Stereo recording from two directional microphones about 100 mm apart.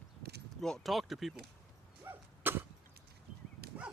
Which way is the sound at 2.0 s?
20° right (ahead or behind).